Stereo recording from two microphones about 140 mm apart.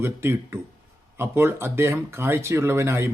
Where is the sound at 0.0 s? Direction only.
20° right (ahead or behind).